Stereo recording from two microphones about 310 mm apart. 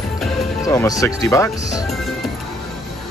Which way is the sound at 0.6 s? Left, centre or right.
Centre.